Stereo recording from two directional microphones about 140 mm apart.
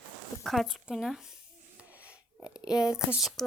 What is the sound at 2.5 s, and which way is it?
Speech, 5° right (ahead or behind).